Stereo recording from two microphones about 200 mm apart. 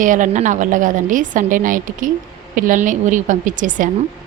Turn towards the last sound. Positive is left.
turn(degrees=-40)  # may be behind; listen again after turning